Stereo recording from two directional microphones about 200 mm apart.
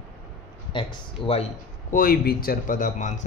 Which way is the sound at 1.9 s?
45° left (ahead or behind).